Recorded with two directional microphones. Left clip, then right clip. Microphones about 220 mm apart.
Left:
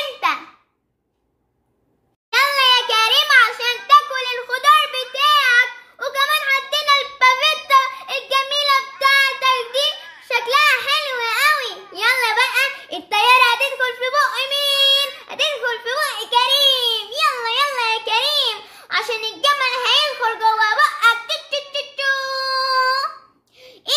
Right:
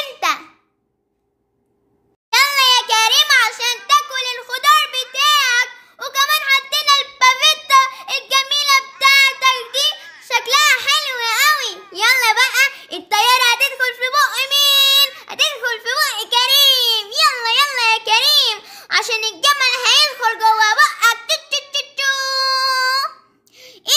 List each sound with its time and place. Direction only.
0.2 s babbling: 45° right (ahead or behind)
2.3 s child singing: 45° right (ahead or behind)